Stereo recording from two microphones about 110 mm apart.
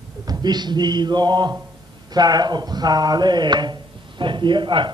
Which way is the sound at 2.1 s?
40° right (ahead or behind).